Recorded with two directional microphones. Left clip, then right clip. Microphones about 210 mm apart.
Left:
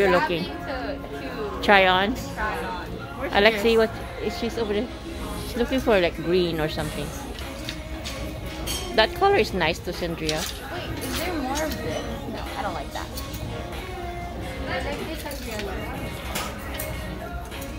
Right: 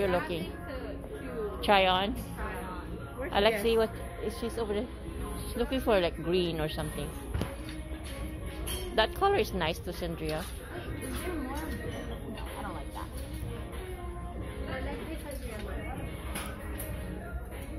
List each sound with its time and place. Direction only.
0.0 s speech: 20° left (ahead or behind)
1.6 s speech: 15° left (ahead or behind)
3.3 s speech: 10° left (ahead or behind)
8.9 s speech: 10° left (ahead or behind)